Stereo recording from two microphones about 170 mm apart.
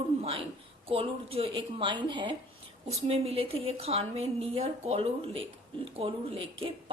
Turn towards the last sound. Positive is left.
turn(degrees=-30)  # may be behind; listen again after turning